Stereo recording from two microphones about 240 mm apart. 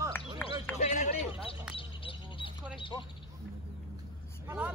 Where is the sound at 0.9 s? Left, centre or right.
Left.